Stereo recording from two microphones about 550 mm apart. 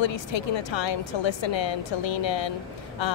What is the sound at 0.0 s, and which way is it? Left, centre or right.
A woman's voice, left.